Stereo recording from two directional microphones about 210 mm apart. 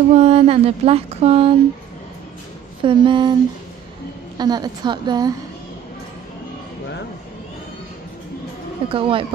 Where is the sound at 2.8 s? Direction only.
25° right (ahead or behind).